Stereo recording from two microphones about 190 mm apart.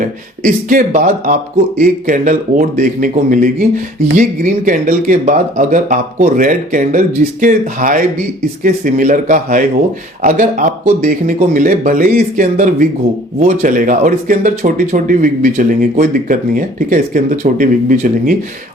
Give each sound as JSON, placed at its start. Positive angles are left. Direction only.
{"t": 0.0, "sound": "speech", "side_deg": -45}